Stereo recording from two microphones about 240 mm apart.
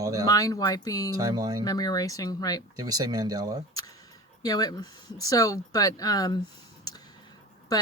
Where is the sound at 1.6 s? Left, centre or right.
Centre.